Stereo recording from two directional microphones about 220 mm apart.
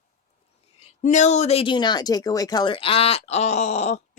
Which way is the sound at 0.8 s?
35° left (ahead or behind).